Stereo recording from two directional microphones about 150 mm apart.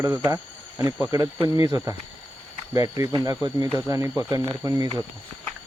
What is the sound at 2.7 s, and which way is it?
Speech, 25° right (ahead or behind).